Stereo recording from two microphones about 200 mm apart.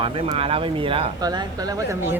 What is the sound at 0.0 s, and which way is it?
Speech, 25° right (ahead or behind).